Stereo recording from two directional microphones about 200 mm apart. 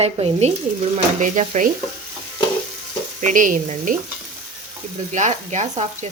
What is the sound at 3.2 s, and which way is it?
Speech, 40° right (ahead or behind).